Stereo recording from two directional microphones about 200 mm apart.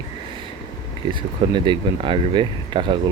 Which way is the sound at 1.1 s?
25° right (ahead or behind).